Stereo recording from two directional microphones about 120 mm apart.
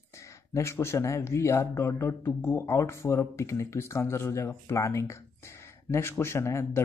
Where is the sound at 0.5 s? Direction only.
20° left (ahead or behind).